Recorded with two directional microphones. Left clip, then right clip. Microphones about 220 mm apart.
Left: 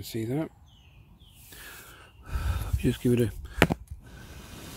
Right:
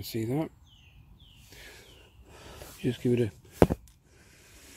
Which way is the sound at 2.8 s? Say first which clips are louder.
Left 2 dB; 15° left (ahead or behind).